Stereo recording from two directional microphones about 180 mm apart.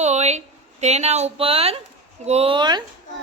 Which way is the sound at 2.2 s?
35° right (ahead or behind).